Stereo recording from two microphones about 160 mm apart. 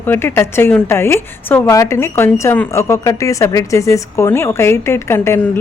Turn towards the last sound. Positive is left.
turn(degrees=15)  # may be behind; listen again after turning